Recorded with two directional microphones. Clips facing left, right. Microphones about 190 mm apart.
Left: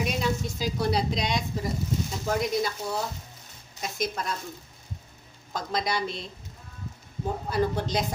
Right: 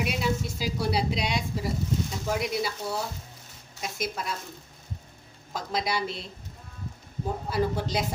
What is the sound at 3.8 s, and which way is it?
Speech, 5° right (ahead or behind).